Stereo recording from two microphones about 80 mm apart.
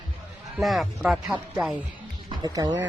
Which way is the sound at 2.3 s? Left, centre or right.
Right.